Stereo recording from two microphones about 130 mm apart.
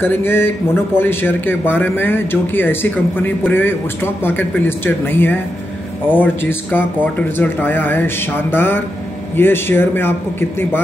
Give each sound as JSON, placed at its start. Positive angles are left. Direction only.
{"t": 0.0, "sound": "speech", "side_deg": 15}